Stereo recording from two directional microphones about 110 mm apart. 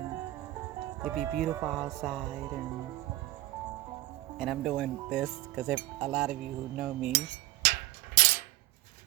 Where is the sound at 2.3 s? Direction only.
25° right (ahead or behind).